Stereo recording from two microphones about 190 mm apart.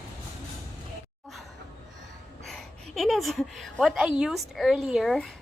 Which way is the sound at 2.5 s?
Centre (ahead or behind).